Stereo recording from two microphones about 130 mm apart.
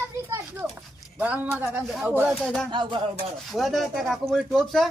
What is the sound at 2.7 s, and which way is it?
Speech, 35° right (ahead or behind).